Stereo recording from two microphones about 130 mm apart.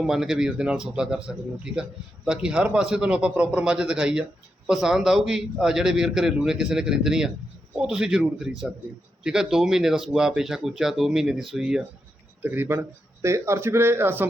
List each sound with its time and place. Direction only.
0.0 s a man's voice: 5° right (ahead or behind)
12.4 s speech: 15° right (ahead or behind)